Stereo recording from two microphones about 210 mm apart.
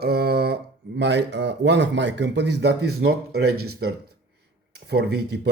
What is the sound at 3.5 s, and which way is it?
Speech, 90° right.